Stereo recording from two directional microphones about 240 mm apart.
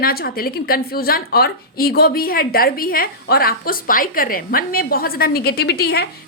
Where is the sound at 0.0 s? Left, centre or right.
Left.